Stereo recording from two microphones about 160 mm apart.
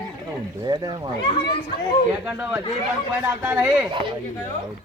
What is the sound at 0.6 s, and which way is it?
Speech, 25° right (ahead or behind).